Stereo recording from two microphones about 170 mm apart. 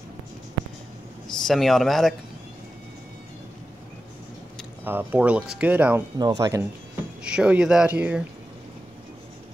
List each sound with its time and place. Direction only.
1.2 s speech: centre (ahead or behind)
4.8 s speech: 10° right (ahead or behind)
6.1 s speech: 25° right (ahead or behind)
7.2 s speech: 5° right (ahead or behind)